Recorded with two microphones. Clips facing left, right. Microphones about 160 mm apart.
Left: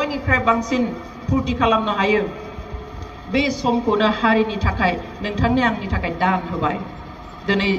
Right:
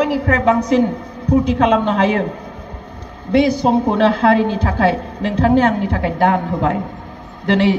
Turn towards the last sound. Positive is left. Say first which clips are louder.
# right 5 dB
turn(degrees=-55)  # may be behind; listen again after turning